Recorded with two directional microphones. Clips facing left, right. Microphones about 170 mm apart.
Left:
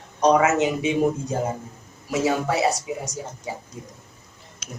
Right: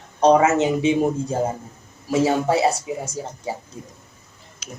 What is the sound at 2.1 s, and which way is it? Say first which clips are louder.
Speech: right 4 dB; 30° right (ahead or behind).